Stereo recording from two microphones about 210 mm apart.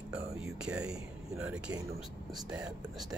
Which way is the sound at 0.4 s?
5° right (ahead or behind).